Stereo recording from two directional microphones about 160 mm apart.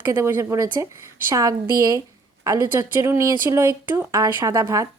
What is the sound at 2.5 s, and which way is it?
A woman's voice, 20° right (ahead or behind).